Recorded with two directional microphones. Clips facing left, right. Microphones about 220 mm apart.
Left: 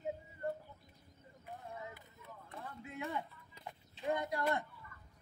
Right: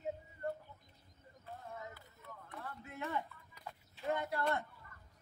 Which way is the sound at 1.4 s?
15° left (ahead or behind).